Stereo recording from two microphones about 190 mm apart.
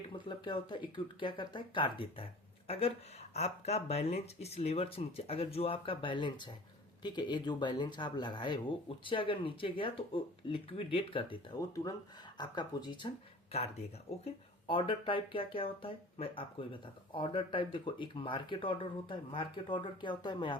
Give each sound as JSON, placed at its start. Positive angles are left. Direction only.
{"t": 0.1, "sound": "speech", "side_deg": 25}
{"t": 14.3, "sound": "speech", "side_deg": 25}